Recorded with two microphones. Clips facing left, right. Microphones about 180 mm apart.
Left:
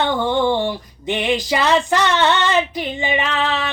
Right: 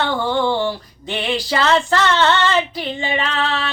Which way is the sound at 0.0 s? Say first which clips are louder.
Left 1 dB; 15° left (ahead or behind).